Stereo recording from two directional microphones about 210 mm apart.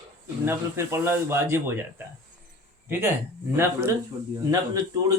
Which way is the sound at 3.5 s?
15° right (ahead or behind).